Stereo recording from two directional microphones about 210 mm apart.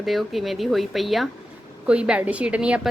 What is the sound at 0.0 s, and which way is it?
A woman's voice, centre (ahead or behind).